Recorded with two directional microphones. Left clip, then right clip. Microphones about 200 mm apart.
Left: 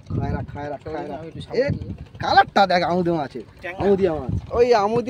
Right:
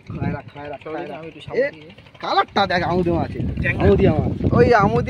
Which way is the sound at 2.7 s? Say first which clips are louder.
Even; 15° right (ahead or behind).